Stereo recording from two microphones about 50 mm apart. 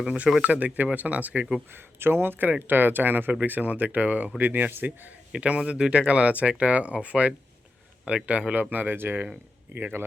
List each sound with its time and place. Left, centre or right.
0.4 s speech: right
1.7 s speech: right
5.3 s speech: right
8.7 s speech: right